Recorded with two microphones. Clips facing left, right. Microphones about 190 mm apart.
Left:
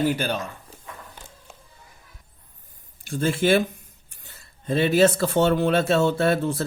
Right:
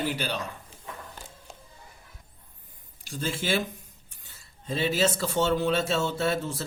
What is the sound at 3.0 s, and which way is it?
Speech, 55° left (ahead or behind).